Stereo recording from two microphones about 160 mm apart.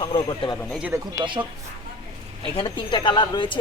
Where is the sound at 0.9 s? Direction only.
25° right (ahead or behind).